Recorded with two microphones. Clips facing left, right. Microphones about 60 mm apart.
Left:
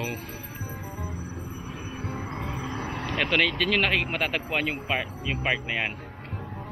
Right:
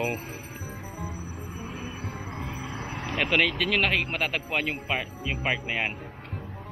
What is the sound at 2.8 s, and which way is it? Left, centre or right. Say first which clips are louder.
Speech: even; centre.